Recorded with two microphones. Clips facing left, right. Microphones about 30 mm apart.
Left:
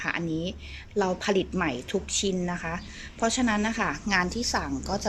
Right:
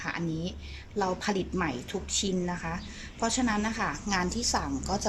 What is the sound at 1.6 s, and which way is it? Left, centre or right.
Speech, left.